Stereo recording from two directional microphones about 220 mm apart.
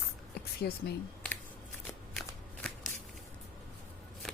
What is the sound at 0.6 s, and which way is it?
Speech, 45° left (ahead or behind).